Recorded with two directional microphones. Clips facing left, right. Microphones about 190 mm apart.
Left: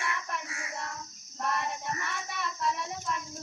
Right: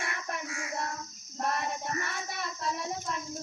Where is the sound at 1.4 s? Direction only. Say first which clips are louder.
Right 1 dB; 40° right (ahead or behind).